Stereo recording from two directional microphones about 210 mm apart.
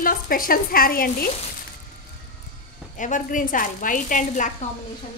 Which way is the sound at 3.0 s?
35° left (ahead or behind).